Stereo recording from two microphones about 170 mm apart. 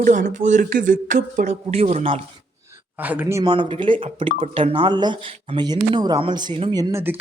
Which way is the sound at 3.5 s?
30° right (ahead or behind).